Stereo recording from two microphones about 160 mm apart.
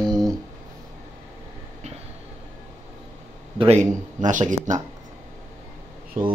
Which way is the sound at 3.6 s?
45° right (ahead or behind).